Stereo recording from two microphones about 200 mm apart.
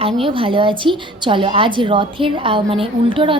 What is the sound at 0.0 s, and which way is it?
A woman's voice, 25° right (ahead or behind).